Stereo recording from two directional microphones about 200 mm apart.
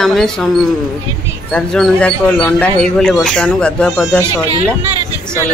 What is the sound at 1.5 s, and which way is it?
Speech, 5° left (ahead or behind).